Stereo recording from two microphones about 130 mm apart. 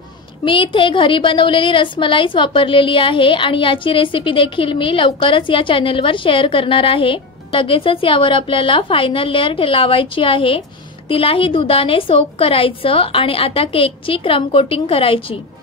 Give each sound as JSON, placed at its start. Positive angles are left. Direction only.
{"t": 0.5, "sound": "a woman's voice", "side_deg": 40}